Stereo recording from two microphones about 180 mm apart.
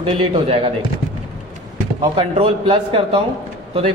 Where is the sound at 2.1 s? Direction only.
30° right (ahead or behind).